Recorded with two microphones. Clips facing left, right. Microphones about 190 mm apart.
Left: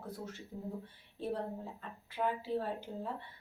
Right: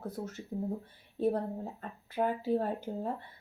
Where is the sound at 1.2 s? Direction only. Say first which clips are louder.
Right 7 dB; 45° right (ahead or behind).